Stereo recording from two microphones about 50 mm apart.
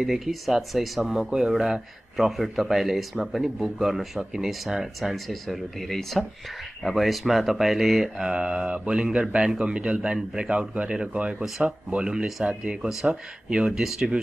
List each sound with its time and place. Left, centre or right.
0.0 s speech: centre
8.2 s speech: centre
13.7 s speech: centre